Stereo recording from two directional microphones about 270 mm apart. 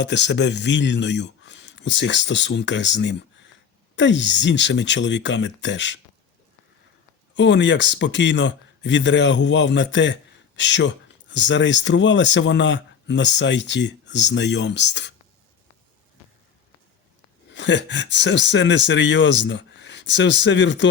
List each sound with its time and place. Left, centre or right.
0.0 s a man's voice: left
7.3 s a man's voice: left
17.5 s a man's voice: left